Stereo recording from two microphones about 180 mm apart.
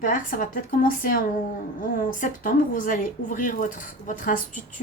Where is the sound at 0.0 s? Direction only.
50° left (ahead or behind).